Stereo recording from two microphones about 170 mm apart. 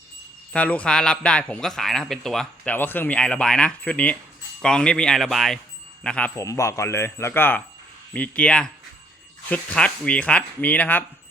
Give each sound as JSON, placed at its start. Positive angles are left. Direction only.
{"t": 0.5, "sound": "a man's voice", "side_deg": 10}